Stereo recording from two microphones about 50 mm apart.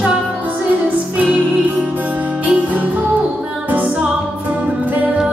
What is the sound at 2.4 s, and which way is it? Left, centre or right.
Music, right.